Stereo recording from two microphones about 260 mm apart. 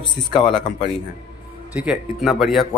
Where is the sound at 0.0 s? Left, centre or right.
Centre.